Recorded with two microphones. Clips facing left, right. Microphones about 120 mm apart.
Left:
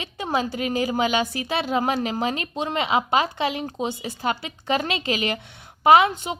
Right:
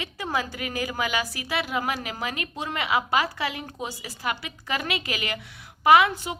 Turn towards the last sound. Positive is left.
turn(degrees=20)  # may be behind; listen again after turning